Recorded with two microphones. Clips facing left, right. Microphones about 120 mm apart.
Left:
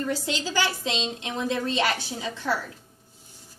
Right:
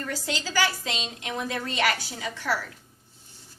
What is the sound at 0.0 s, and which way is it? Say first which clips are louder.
A woman's voice: left 4 dB; 20° left (ahead or behind).